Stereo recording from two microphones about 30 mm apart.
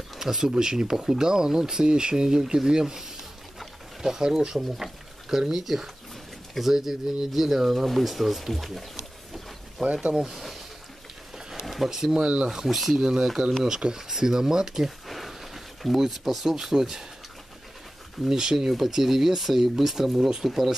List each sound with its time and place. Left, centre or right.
0.2 s speech: centre
5.5 s speech: centre
11.6 s a sound: centre
11.9 s speech: centre
12.2 s speech: right
12.6 s speech: centre
13.0 s speech: right
13.9 s speech: centre
15.0 s a sound: centre
16.0 s speech: centre
18.3 s speech: centre
20.2 s speech: right
20.4 s speech: centre